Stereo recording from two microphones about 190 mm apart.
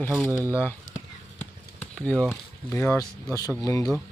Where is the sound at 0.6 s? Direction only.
10° left (ahead or behind).